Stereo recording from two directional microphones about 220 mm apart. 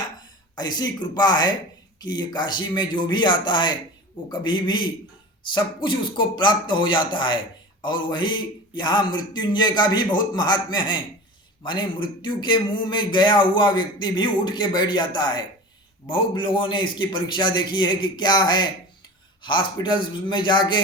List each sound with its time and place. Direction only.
0.5 s a man's voice: 20° left (ahead or behind)